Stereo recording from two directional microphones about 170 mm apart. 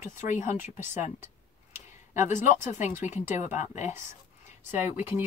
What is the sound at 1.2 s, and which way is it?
Tick-tock, 10° right (ahead or behind).